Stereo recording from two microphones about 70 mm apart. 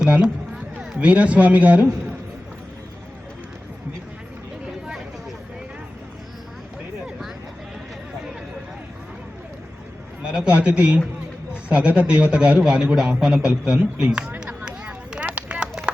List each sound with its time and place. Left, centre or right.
0.0 s a sound: centre
0.9 s a man's voice: right
10.3 s a man's voice: centre
15.4 s run: centre